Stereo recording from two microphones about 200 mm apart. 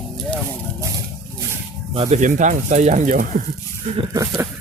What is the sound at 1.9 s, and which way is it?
Speech, 25° right (ahead or behind).